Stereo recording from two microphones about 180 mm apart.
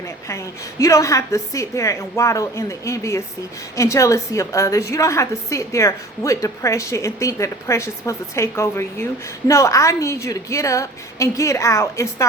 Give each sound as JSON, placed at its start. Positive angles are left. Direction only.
{"t": 0.3, "sound": "a woman's voice", "side_deg": 15}